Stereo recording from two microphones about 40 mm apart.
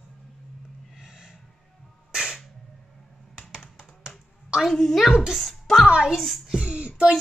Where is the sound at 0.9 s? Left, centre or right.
Centre.